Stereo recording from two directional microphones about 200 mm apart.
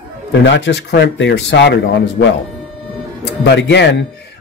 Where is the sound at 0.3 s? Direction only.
60° left (ahead or behind).